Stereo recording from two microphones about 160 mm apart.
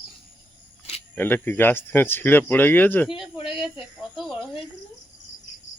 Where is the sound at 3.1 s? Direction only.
30° left (ahead or behind).